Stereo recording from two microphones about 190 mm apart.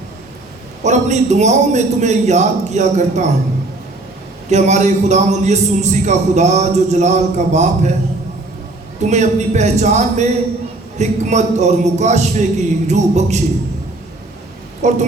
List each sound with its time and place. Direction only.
0.8 s a man's voice: 40° right (ahead or behind)
4.4 s a man's voice: 35° right (ahead or behind)
9.0 s a man's voice: 35° right (ahead or behind)
14.8 s a man's voice: 35° right (ahead or behind)